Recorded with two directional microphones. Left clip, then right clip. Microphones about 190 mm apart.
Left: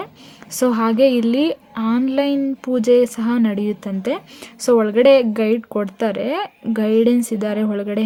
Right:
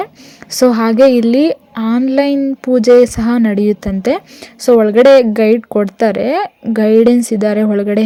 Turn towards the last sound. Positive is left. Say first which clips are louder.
# right 8 dB
turn(degrees=-25)  # may be behind; listen again after turning